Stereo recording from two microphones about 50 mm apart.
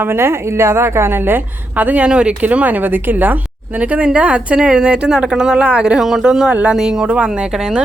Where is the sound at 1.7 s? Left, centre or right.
Right.